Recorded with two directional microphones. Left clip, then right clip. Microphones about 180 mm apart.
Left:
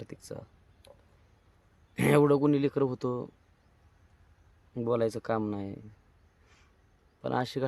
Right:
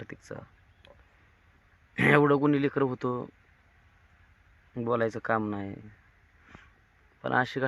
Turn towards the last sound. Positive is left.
turn(degrees=10)  # may be behind; listen again after turning